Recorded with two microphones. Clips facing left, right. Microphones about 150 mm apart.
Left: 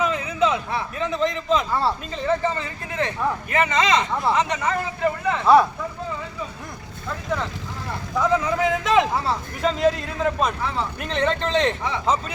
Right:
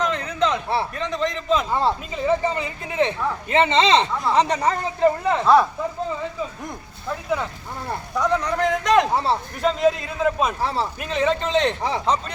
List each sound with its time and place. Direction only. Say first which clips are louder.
0.0 s a sound: left 1 dB; 5° left (ahead or behind)
0.9 s a man's voice: left 1 dB; 5° left (ahead or behind)
1.7 s speech: right 2 dB; 15° right (ahead or behind); by 5.4 s 35° right (ahead or behind)
8.2 s a man's voice: left 1 dB; 5° left (ahead or behind)
9.1 s speech: right 3 dB; 30° right (ahead or behind)
9.6 s a man's voice: even; centre (ahead or behind)
10.6 s speech: right 3 dB; 35° right (ahead or behind)
11.0 s a man's voice: right 1 dB; 5° right (ahead or behind)
11.8 s speech: right 3 dB; 35° right (ahead or behind)